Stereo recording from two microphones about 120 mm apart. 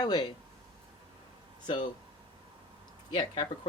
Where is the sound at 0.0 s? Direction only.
35° left (ahead or behind).